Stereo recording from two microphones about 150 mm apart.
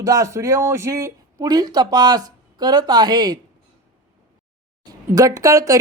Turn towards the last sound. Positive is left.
turn(degrees=-20)  # may be behind; listen again after turning